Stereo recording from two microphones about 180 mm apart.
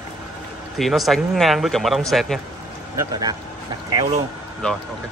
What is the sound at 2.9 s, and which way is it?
Speech, 20° right (ahead or behind).